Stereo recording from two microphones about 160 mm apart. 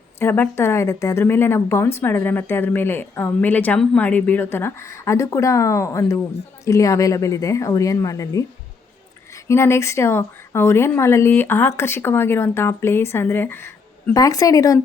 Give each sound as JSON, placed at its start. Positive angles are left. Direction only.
{"t": 0.2, "sound": "a woman's voice", "side_deg": 15}